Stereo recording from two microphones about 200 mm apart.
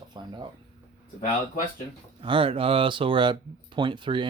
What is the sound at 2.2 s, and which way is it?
Speech, 25° right (ahead or behind).